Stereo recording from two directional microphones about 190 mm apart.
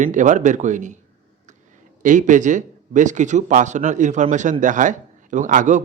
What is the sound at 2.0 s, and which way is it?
A man's voice, 40° right (ahead or behind).